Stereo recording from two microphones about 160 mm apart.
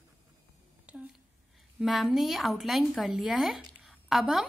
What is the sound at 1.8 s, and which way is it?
A woman's voice, centre (ahead or behind).